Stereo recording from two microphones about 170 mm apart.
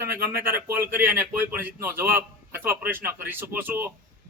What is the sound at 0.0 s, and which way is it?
A man's voice, 15° right (ahead or behind).